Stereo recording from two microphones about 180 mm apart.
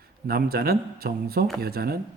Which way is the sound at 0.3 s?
55° right (ahead or behind).